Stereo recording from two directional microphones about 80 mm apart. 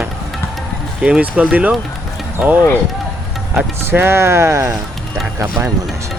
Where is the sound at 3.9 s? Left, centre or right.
Right.